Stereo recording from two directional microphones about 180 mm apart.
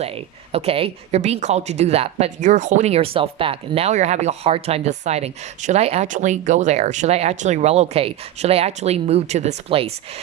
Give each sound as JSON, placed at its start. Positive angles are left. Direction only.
{"t": 0.5, "sound": "speech", "side_deg": -35}